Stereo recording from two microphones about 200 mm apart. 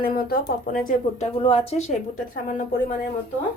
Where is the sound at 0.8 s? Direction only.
30° left (ahead or behind).